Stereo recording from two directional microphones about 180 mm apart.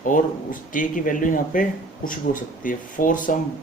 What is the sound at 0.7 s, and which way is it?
Speech, 50° left (ahead or behind).